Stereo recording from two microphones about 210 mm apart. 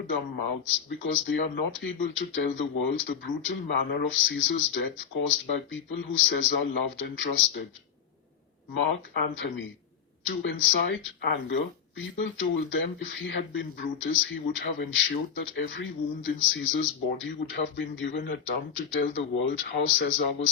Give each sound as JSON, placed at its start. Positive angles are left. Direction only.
{"t": 0.6, "sound": "speech", "side_deg": 65}
{"t": 8.8, "sound": "speech", "side_deg": 60}